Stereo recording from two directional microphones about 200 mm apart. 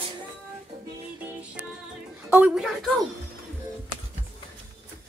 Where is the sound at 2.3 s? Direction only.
5° right (ahead or behind).